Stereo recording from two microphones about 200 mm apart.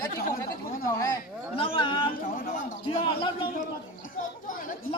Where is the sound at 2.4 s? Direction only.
45° left (ahead or behind).